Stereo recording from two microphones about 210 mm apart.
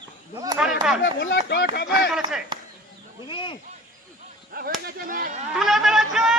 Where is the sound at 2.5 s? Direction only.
20° right (ahead or behind).